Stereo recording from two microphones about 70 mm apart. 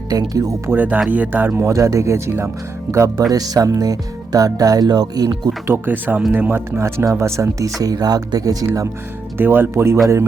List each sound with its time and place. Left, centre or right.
0.1 s speech: right
0.7 s speech: right
1.6 s speech: right
3.3 s speech: right
5.6 s speech: right
5.9 s speech: right
6.8 s speech: right
9.4 s speech: right
9.7 s speech: right